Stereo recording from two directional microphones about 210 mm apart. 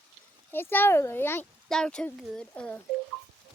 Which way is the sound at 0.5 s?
10° left (ahead or behind).